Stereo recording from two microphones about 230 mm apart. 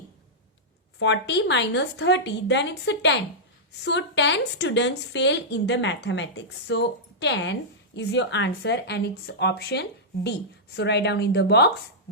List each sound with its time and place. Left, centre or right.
0.9 s speech: left